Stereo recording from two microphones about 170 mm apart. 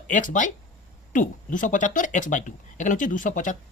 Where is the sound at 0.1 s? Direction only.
50° left (ahead or behind).